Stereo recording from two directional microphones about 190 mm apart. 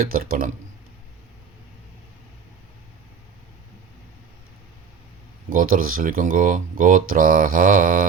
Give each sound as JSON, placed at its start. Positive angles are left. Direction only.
{"t": 0.1, "sound": "speech", "side_deg": -50}
{"t": 5.5, "sound": "speech", "side_deg": -45}